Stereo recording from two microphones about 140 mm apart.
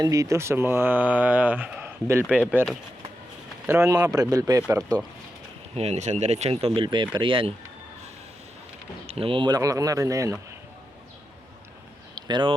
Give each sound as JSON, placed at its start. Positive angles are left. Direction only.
{"t": 0.0, "sound": "speech", "side_deg": -25}
{"t": 5.7, "sound": "speech", "side_deg": -50}
{"t": 9.0, "sound": "speech", "side_deg": -40}
{"t": 9.6, "sound": "speech", "side_deg": -25}
{"t": 12.1, "sound": "a sound", "side_deg": -35}